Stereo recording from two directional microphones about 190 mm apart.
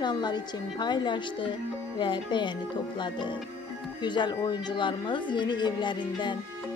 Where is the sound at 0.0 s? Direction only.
25° left (ahead or behind).